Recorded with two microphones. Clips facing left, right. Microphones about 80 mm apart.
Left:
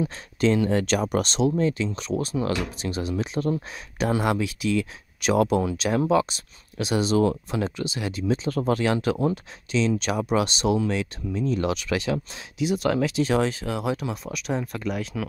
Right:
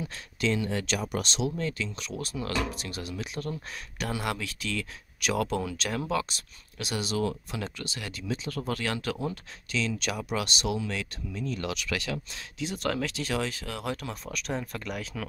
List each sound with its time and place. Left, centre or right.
0.0 s speech: left
1.6 s speech: left
12.5 s speech: centre
13.1 s speech: left; by 15.2 s centre